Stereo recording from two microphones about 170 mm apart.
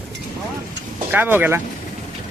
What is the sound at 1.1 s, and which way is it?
Speech, 10° right (ahead or behind).